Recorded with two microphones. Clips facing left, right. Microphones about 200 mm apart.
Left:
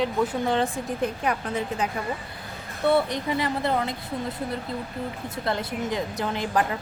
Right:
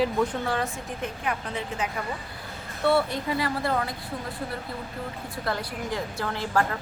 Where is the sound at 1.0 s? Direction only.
40° left (ahead or behind).